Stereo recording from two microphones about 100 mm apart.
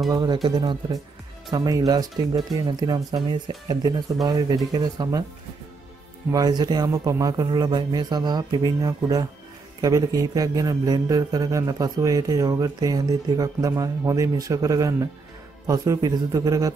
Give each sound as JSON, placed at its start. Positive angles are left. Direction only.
{"t": 0.1, "sound": "speech", "side_deg": -45}
{"t": 1.5, "sound": "a man's voice", "side_deg": -35}
{"t": 6.3, "sound": "a man's voice", "side_deg": -40}